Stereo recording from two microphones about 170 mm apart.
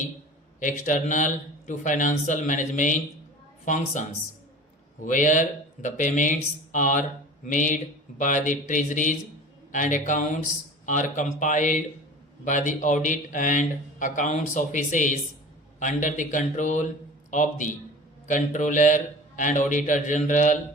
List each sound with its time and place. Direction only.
0.6 s a man's voice: 45° left (ahead or behind)
5.0 s a man's voice: 45° left (ahead or behind)